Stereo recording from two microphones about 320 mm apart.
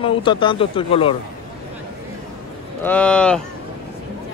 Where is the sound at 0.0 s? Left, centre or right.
Centre.